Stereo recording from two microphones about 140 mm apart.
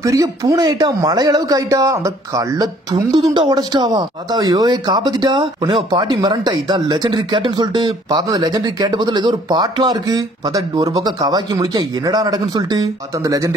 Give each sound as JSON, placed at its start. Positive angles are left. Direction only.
{"t": 0.0, "sound": "speech", "side_deg": -25}